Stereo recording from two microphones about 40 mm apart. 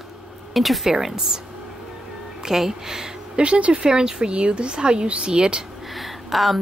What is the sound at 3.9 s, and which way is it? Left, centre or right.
A woman's voice, centre.